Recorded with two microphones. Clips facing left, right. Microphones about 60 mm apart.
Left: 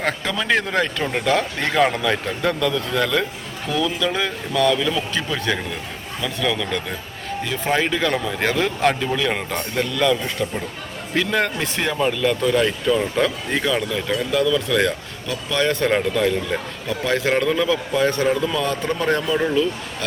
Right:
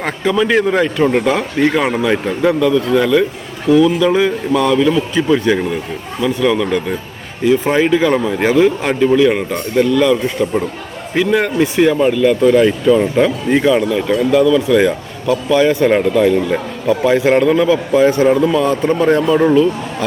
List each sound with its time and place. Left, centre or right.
0.0 s a man's voice: centre